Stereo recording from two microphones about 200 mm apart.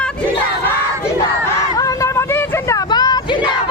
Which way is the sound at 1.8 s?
15° left (ahead or behind).